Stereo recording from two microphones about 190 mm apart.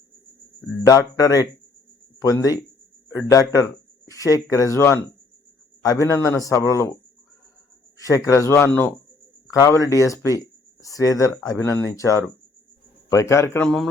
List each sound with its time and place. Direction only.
0.8 s speech: 20° left (ahead or behind)
7.9 s speech: 15° left (ahead or behind)